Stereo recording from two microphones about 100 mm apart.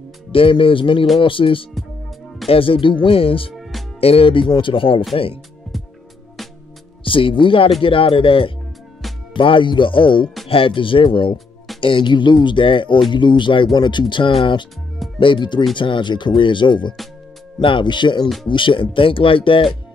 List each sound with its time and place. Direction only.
0.3 s speech: 60° left (ahead or behind)
7.1 s speech: 60° left (ahead or behind)